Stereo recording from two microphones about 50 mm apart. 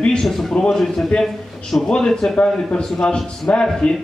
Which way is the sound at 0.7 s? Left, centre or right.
Centre.